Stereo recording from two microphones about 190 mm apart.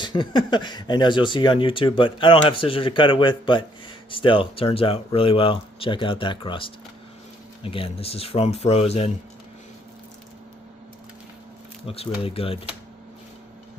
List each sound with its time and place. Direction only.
0.0 s speech: 25° left (ahead or behind)
11.9 s speech: 30° left (ahead or behind)